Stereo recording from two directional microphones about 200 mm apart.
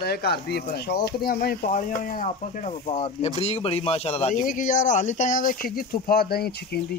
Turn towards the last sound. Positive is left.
turn(degrees=50)  # may be behind; listen again after turning